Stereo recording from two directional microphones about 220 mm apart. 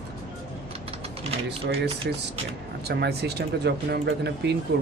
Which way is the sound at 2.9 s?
45° right (ahead or behind).